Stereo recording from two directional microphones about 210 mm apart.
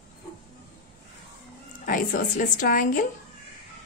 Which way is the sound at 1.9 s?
40° left (ahead or behind).